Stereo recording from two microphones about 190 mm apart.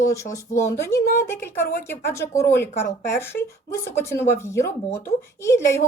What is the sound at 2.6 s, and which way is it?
Speech, 55° left (ahead or behind).